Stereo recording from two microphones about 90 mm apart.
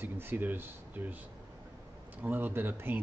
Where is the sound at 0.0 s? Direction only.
20° right (ahead or behind).